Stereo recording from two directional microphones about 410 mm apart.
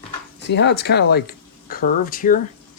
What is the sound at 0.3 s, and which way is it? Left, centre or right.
Speech, left.